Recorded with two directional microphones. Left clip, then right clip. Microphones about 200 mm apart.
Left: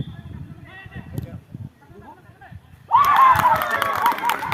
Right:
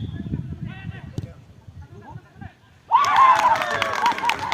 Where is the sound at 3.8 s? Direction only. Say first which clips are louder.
Left 1 dB; 25° right (ahead or behind).